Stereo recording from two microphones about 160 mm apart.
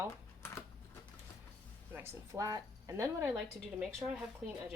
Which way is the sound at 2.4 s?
20° right (ahead or behind).